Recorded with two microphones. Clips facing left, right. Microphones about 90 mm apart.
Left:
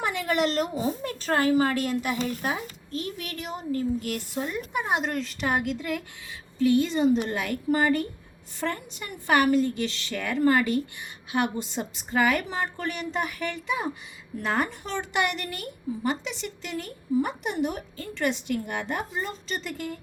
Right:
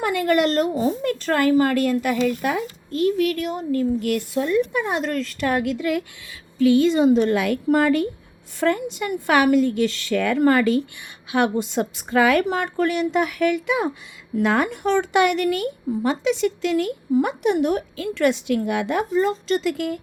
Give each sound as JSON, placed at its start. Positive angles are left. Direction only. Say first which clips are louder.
{"t": 0.0, "sound": "speech", "louder": "right 6 dB", "side_deg": -55}
{"t": 1.0, "sound": "speech", "louder": "right 3 dB", "side_deg": -60}
{"t": 2.2, "sound": "speech", "louder": "right 7 dB", "side_deg": -65}
{"t": 3.0, "sound": "speech", "louder": "right 17 dB", "side_deg": 30}
{"t": 3.5, "sound": "speech", "louder": "right 6 dB", "side_deg": -55}
{"t": 4.4, "sound": "speech", "louder": "right 9 dB", "side_deg": -90}
{"t": 8.6, "sound": "a woman's voice", "louder": "right 10 dB", "side_deg": -80}